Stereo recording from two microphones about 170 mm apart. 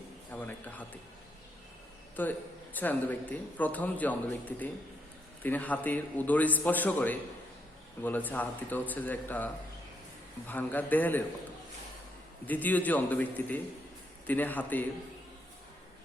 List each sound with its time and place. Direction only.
0.3 s a sound: 10° left (ahead or behind)
2.2 s a man's voice: 10° left (ahead or behind)
10.5 s a man's voice: 10° left (ahead or behind)
12.5 s a man's voice: 10° left (ahead or behind)